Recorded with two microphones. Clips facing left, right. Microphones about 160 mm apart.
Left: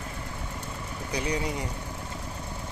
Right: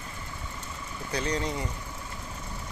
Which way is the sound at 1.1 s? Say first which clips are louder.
Even; 10° left (ahead or behind).